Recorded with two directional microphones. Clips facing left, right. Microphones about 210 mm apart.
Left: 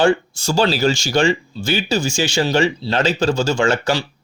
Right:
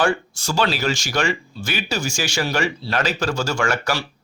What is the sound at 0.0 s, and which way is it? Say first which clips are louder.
Speech: left 5 dB; 25° left (ahead or behind).